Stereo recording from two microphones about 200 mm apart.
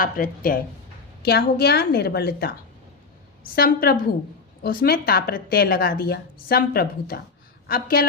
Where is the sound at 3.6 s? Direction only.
50° left (ahead or behind).